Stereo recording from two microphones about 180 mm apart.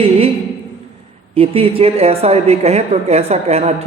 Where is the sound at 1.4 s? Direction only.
30° right (ahead or behind).